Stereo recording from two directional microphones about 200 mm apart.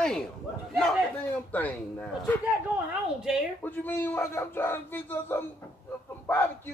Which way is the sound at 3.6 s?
10° left (ahead or behind).